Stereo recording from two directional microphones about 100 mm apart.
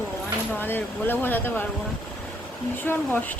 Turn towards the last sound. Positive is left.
turn(degrees=20)  # may be behind; listen again after turning